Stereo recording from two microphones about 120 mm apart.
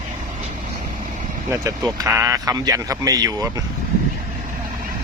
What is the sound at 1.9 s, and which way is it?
Speech, 25° right (ahead or behind).